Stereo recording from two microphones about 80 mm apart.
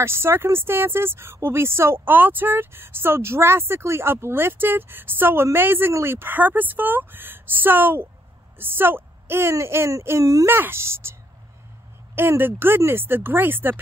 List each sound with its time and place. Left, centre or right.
0.0 s a woman's voice: right
10.5 s a woman's voice: right
12.2 s speech: right